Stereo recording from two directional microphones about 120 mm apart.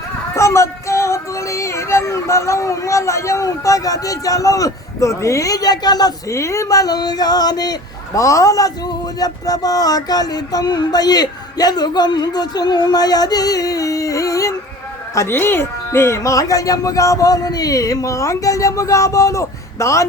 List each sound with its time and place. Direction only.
0.3 s music: 25° left (ahead or behind)